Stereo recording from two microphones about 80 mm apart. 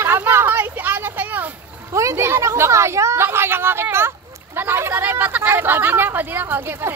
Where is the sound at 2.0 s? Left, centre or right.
Right.